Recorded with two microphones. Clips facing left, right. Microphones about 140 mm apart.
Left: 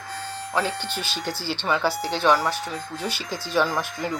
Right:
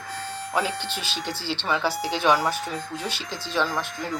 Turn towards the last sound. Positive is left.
turn(degrees=0)  # may be behind; listen again after turning